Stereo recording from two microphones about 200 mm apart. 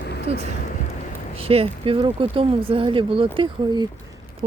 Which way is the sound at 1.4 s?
30° right (ahead or behind).